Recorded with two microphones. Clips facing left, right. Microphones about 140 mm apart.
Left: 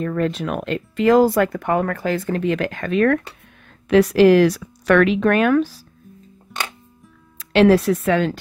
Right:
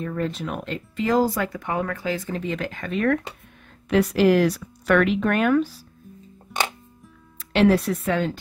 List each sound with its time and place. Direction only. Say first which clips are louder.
0.0 s speech: left 5 dB; 75° left (ahead or behind); by 5.9 s 90° left
6.5 s music: right 3 dB; centre (ahead or behind)
7.3 s speech: left 5 dB; 90° left